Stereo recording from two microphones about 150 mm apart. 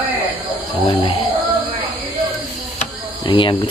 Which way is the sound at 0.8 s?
40° left (ahead or behind).